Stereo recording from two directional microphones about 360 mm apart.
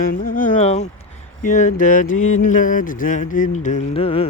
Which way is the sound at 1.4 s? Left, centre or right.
Left.